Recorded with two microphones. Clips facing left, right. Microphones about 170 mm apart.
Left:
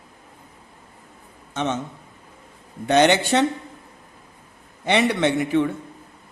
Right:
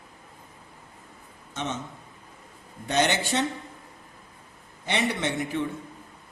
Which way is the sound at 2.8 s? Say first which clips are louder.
Left 8 dB; 70° left (ahead or behind).